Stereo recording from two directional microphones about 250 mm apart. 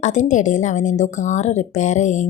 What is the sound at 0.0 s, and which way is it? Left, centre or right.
A woman's voice, left.